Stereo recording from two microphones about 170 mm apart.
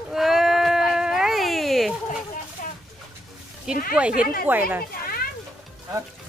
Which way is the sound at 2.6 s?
50° left (ahead or behind).